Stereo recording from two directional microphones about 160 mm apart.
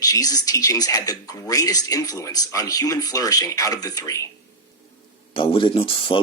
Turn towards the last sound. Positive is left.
turn(degrees=35)  # may be behind; listen again after turning